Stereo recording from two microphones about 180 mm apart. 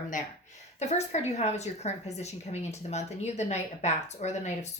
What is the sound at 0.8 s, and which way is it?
A woman's voice, 35° left (ahead or behind).